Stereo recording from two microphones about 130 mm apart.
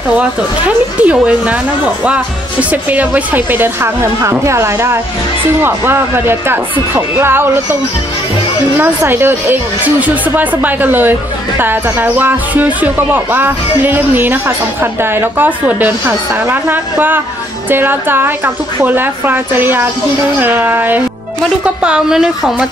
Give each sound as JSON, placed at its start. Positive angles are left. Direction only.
{"t": 0.7, "sound": "speech", "side_deg": -10}
{"t": 2.7, "sound": "speech", "side_deg": -10}
{"t": 8.7, "sound": "speech", "side_deg": -15}